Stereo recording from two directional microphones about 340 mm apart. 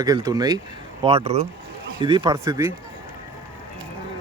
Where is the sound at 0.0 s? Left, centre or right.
Centre.